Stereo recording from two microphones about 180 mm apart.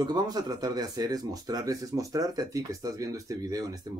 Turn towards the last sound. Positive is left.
turn(degrees=-20)  # may be behind; listen again after turning